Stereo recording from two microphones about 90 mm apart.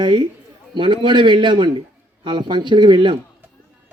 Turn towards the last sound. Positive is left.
turn(degrees=-60)  # may be behind; listen again after turning